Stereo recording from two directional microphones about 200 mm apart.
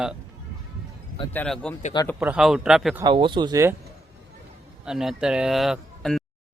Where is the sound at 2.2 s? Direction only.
5° right (ahead or behind).